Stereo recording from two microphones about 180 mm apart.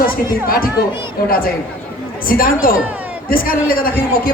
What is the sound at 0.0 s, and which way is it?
Speech, 55° left (ahead or behind).